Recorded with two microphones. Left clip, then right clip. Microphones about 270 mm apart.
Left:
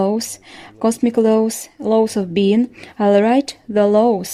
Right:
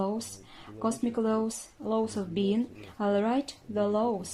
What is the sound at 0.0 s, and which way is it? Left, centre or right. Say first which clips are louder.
Speech: left 14 dB; left.